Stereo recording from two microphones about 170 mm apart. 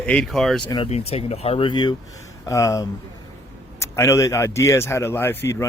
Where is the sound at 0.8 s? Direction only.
35° left (ahead or behind).